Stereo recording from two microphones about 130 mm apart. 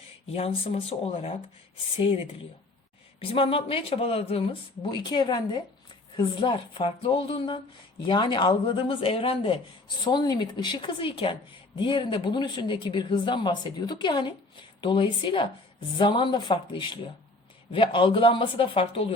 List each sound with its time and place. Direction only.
0.3 s speech: 50° left (ahead or behind)
3.2 s speech: 45° left (ahead or behind)
4.9 s speech: 35° left (ahead or behind)
10.0 s speech: 35° left (ahead or behind)